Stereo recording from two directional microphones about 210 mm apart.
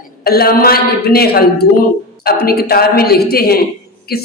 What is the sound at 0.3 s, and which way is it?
A woman's voice, 45° left (ahead or behind).